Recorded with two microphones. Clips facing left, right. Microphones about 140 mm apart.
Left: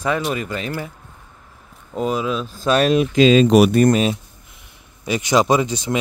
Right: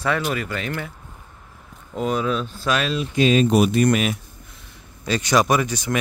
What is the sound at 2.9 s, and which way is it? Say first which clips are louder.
Speech: left 5 dB; 75° left (ahead or behind).